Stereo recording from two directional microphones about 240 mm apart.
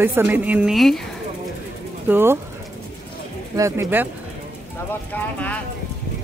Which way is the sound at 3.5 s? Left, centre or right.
Centre.